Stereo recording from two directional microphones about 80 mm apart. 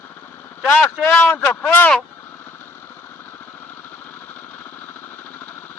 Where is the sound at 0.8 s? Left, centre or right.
Left.